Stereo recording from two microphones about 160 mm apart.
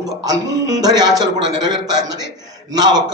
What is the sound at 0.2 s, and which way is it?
A man's voice, 20° right (ahead or behind).